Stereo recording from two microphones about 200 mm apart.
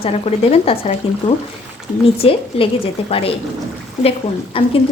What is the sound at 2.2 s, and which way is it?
A woman's voice, 30° left (ahead or behind).